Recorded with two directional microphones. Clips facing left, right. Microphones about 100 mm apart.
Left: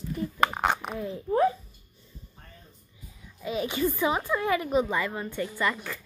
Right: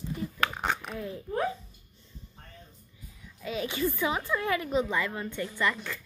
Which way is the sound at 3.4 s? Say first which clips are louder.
Left 3 dB; 15° left (ahead or behind).